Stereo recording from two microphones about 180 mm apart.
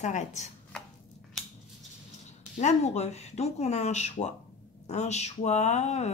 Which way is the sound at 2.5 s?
40° left (ahead or behind).